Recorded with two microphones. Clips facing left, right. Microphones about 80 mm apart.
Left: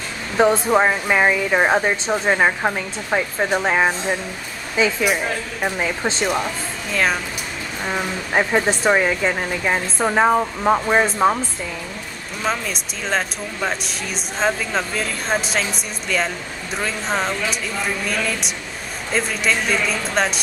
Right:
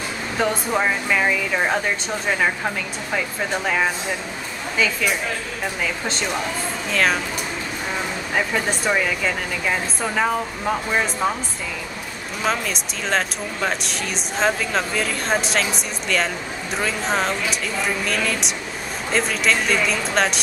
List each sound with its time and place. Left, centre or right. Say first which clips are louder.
0.4 s speech: left 6 dB; left
6.9 s speech: even; centre
7.9 s speech: left 4 dB; left
12.4 s speech: even; centre